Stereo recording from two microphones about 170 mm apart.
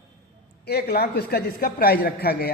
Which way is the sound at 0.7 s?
70° left (ahead or behind).